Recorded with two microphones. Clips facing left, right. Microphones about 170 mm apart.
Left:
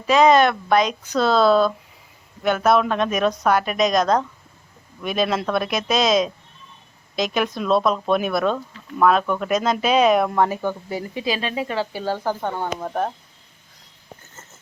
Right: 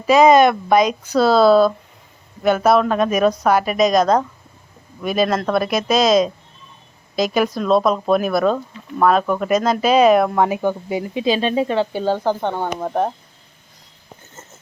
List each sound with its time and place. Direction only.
0.1 s speech: 10° right (ahead or behind)
7.3 s speech: centre (ahead or behind)
8.5 s speech: 10° right (ahead or behind)